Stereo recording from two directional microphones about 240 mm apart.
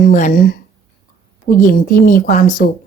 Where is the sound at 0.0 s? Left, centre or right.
Left.